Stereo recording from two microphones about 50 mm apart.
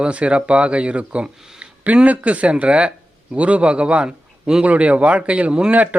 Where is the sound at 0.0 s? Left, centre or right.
Right.